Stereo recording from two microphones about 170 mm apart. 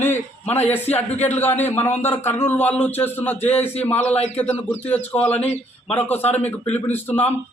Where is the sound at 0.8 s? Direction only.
40° left (ahead or behind).